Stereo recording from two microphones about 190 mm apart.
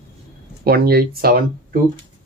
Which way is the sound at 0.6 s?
55° right (ahead or behind).